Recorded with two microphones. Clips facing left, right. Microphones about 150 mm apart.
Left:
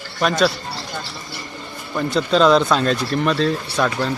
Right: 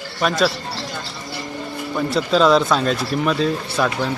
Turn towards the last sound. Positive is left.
turn(degrees=-5)  # may be behind; listen again after turning